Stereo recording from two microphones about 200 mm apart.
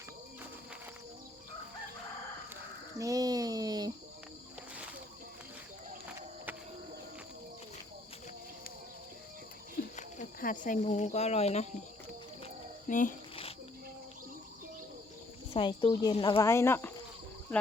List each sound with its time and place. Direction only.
3.0 s a sound: 15° right (ahead or behind)
9.9 s speech: 40° left (ahead or behind)
12.9 s speech: 40° left (ahead or behind)
15.5 s speech: 25° left (ahead or behind)
16.4 s speech: 15° left (ahead or behind)